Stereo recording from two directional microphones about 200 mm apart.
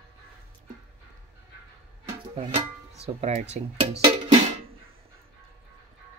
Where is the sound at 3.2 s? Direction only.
35° right (ahead or behind).